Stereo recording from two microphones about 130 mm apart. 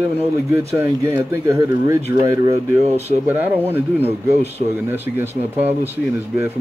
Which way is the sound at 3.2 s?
15° right (ahead or behind).